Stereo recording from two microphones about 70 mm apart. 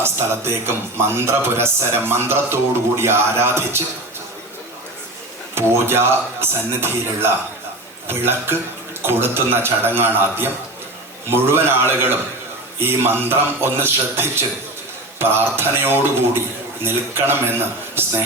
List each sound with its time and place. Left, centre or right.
0.0 s speech: right
5.5 s speech: right